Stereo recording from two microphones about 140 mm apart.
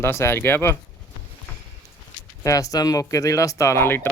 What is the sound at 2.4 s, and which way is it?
Speech, 25° left (ahead or behind).